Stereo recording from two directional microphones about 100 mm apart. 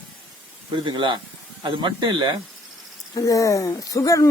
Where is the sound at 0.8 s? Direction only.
55° right (ahead or behind).